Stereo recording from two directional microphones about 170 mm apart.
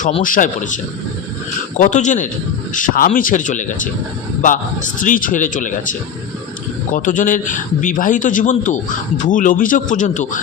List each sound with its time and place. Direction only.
0.2 s a man's voice: 50° left (ahead or behind)
1.8 s a man's voice: 45° left (ahead or behind)